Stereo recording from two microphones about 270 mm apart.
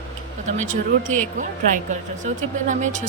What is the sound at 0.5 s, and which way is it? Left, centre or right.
Speech, right.